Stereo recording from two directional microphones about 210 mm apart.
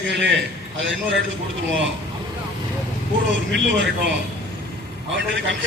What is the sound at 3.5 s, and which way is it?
Speech, 55° right (ahead or behind).